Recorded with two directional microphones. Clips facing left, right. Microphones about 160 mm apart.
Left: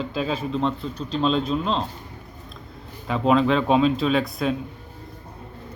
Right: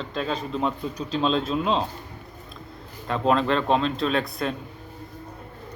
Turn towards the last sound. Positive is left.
turn(degrees=0)  # may be behind; listen again after turning